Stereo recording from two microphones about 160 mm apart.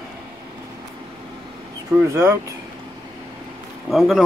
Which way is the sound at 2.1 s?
15° right (ahead or behind).